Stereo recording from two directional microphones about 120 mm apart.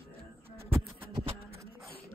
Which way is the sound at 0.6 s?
20° right (ahead or behind).